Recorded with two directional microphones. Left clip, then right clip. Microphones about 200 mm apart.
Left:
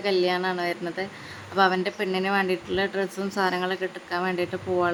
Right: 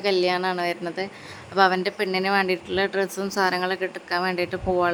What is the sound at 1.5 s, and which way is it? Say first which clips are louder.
A woman's voice: right 2 dB; 35° right (ahead or behind).